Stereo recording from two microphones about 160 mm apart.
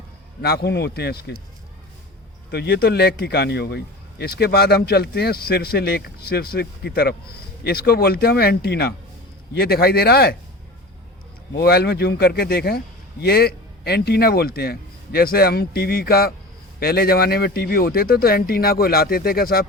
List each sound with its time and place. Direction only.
0.4 s a man's voice: 90° left
2.5 s a man's voice: 90° left
9.6 s a man's voice: 80° left
11.5 s a man's voice: 85° left